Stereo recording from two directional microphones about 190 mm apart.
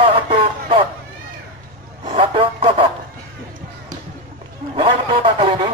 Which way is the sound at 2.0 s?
30° right (ahead or behind).